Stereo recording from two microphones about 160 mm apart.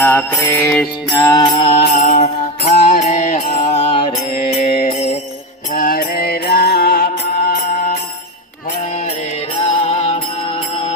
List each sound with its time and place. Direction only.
0.0 s mantra: 10° left (ahead or behind)
1.5 s mantra: 40° left (ahead or behind)
1.8 s music: 70° left (ahead or behind)
2.2 s mantra: 55° left (ahead or behind)
5.7 s music: 65° left (ahead or behind)
9.6 s music: 40° left (ahead or behind)